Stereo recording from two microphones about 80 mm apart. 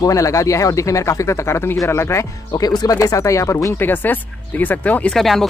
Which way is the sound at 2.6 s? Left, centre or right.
Left.